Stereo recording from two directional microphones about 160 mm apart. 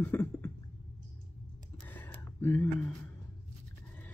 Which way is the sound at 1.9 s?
15° left (ahead or behind).